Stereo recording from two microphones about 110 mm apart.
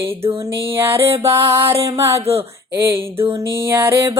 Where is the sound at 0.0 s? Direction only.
55° right (ahead or behind).